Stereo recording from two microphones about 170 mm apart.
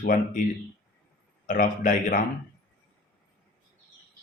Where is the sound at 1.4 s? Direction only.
50° left (ahead or behind).